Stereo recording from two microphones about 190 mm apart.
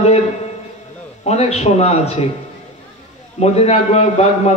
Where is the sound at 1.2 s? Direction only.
35° left (ahead or behind).